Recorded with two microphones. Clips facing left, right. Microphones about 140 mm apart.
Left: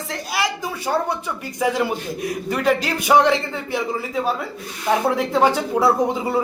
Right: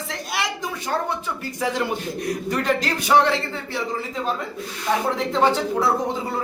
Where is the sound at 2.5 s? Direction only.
10° left (ahead or behind).